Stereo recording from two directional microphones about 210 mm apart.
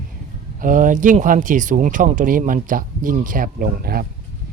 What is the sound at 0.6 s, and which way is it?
Speech, 40° right (ahead or behind).